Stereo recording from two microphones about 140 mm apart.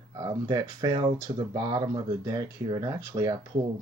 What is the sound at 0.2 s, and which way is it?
Speech, 30° right (ahead or behind).